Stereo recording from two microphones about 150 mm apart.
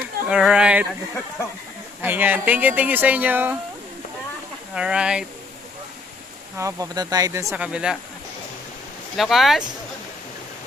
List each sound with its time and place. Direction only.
0.3 s a sound: 5° right (ahead or behind)
2.0 s speech: 10° right (ahead or behind)
4.7 s speech: 5° right (ahead or behind)
6.6 s speech: 20° right (ahead or behind)
7.5 s speech: 5° right (ahead or behind)
9.1 s speech: centre (ahead or behind)